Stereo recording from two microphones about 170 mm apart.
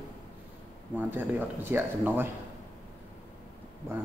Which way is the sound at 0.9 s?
10° right (ahead or behind).